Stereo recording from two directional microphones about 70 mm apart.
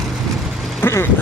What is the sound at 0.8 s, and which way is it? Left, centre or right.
Speech, left.